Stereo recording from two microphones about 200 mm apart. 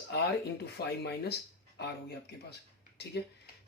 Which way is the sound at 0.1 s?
55° left (ahead or behind).